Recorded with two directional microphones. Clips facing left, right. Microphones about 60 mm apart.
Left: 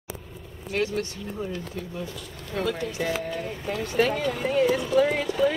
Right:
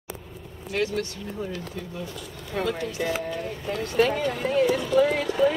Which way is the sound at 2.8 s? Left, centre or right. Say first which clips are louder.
Even; centre.